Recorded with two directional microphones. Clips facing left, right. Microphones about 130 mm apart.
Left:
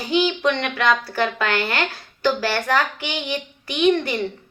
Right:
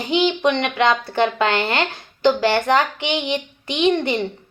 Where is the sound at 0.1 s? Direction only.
20° right (ahead or behind).